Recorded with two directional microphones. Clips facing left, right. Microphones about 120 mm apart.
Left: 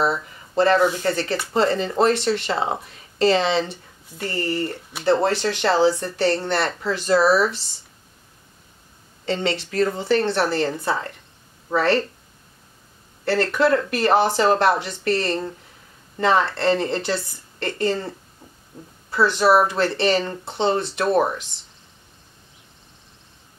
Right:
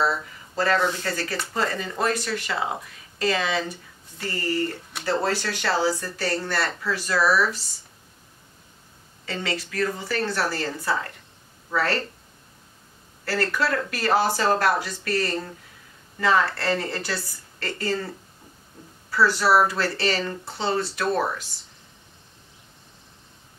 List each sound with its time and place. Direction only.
0.0 s speech: 20° left (ahead or behind)
9.2 s speech: 25° left (ahead or behind)
13.2 s speech: 25° left (ahead or behind)